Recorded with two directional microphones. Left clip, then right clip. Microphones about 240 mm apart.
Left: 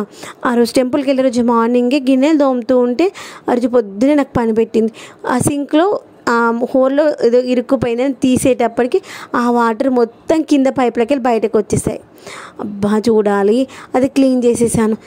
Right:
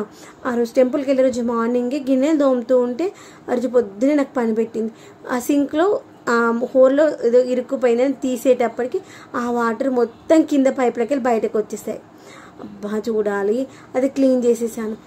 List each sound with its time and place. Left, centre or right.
0.4 s a woman's voice: left